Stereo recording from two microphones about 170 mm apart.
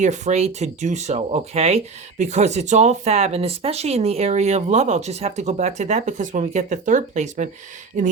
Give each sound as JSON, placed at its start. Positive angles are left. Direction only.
{"t": 0.0, "sound": "speech", "side_deg": -45}